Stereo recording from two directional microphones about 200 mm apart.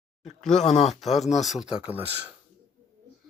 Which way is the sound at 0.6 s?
35° left (ahead or behind).